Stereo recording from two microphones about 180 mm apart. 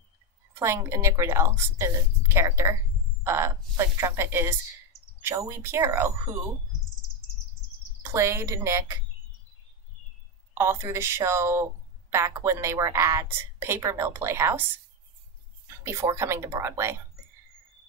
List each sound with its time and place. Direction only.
0.6 s a woman's voice: 15° right (ahead or behind)
8.0 s a woman's voice: 15° right (ahead or behind)
10.5 s a woman's voice: 15° right (ahead or behind)
15.8 s a woman's voice: 15° right (ahead or behind)